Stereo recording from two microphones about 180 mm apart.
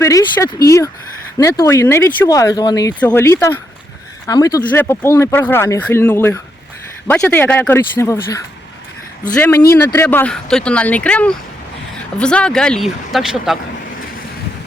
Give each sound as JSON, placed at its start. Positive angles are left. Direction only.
{"t": 0.0, "sound": "speech", "side_deg": 15}
{"t": 9.4, "sound": "speech", "side_deg": 15}